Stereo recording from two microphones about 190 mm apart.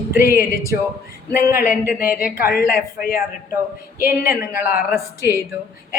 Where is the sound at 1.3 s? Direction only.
15° right (ahead or behind).